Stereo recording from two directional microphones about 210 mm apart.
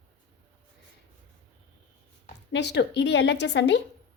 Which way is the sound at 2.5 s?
55° left (ahead or behind).